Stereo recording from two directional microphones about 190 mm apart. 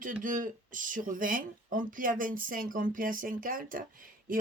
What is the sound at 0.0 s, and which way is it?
Speech, 45° right (ahead or behind).